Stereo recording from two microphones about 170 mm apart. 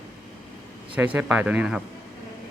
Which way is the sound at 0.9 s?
10° right (ahead or behind).